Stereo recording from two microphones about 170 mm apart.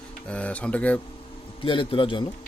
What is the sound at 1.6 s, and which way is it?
Speech, 30° left (ahead or behind).